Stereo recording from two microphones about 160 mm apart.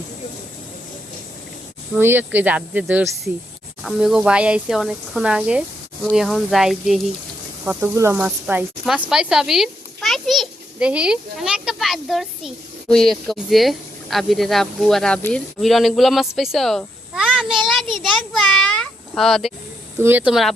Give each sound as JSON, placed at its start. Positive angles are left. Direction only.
{"t": 2.0, "sound": "speech", "side_deg": -15}
{"t": 7.6, "sound": "a child's voice", "side_deg": -15}
{"t": 20.0, "sound": "speech", "side_deg": -10}